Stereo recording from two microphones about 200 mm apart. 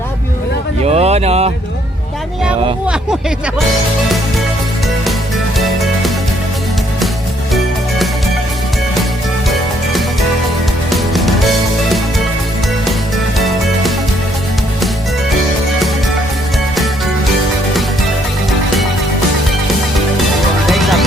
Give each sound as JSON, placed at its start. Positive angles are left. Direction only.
{"t": 0.9, "sound": "speech", "side_deg": -30}
{"t": 2.8, "sound": "speech", "side_deg": -5}
{"t": 10.8, "sound": "music", "side_deg": 0}
{"t": 13.4, "sound": "music", "side_deg": 0}
{"t": 20.7, "sound": "music", "side_deg": 0}